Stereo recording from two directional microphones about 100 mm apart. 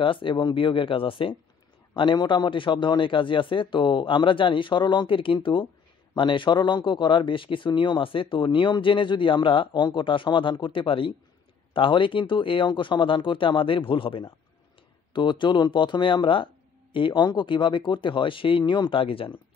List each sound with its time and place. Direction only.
0.0 s a man's voice: 60° left (ahead or behind)